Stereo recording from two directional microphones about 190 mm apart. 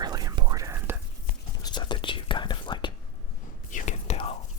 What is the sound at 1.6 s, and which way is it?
Whispering, 25° left (ahead or behind).